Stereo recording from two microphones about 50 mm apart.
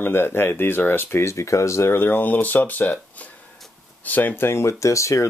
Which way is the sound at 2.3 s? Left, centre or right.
Left.